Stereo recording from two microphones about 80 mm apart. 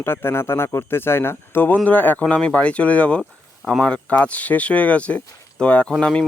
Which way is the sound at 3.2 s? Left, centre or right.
Centre.